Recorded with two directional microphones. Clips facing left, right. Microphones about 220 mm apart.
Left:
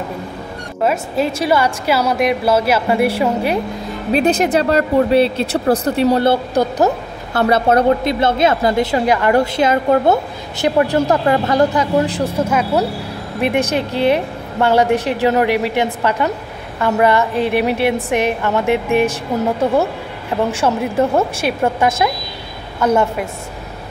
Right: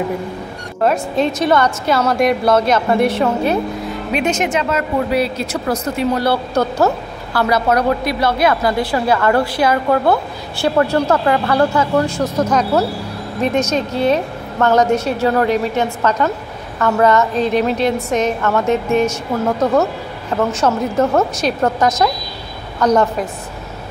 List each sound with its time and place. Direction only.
0.8 s a woman's voice: 5° left (ahead or behind)
4.1 s speech: 35° left (ahead or behind); by 6.9 s 15° left (ahead or behind)
7.3 s a woman's voice: 30° left (ahead or behind); by 23.2 s 10° left (ahead or behind)